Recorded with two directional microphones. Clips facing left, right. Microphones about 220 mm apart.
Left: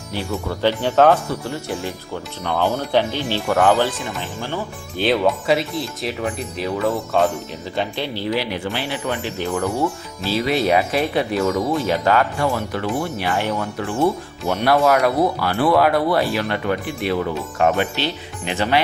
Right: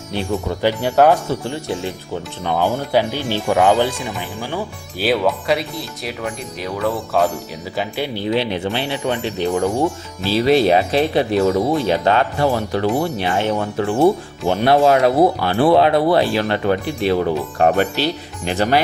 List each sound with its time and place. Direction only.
0.1 s speech: 20° right (ahead or behind)
2.4 s speech: 15° right (ahead or behind)
5.0 s speech: centre (ahead or behind)
7.8 s speech: 10° right (ahead or behind)
10.3 s speech: 30° right (ahead or behind)
13.2 s speech: 25° right (ahead or behind)